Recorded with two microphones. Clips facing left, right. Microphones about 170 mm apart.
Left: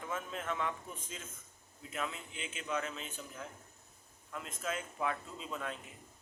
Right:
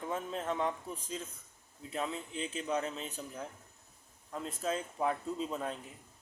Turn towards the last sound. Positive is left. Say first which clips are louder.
# right 6 dB
turn(degrees=-35)  # may be behind; listen again after turning